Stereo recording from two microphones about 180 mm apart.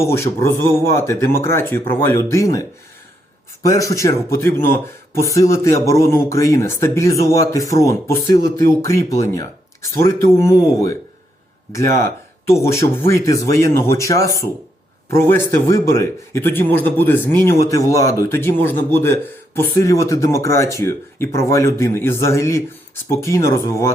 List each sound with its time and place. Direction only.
0.0 s speech: 15° left (ahead or behind)